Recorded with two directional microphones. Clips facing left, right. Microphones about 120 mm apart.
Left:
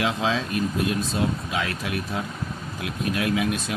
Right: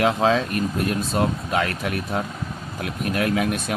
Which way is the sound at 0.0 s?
50° right (ahead or behind).